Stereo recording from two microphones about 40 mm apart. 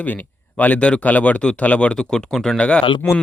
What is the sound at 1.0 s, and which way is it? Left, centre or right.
Speech, left.